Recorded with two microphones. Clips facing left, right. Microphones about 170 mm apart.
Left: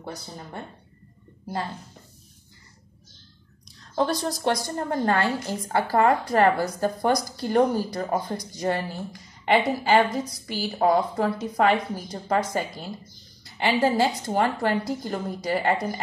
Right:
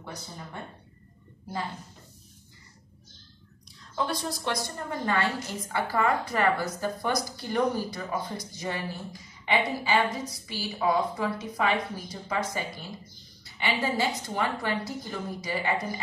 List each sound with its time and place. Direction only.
3.9 s a woman's voice: 40° left (ahead or behind)